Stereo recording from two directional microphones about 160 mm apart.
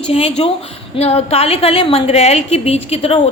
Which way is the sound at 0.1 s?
40° left (ahead or behind).